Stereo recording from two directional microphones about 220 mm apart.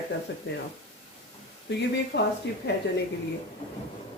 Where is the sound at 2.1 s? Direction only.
50° left (ahead or behind).